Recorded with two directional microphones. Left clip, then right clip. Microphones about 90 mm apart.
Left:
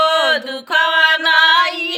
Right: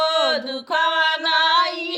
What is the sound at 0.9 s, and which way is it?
Music, 10° left (ahead or behind).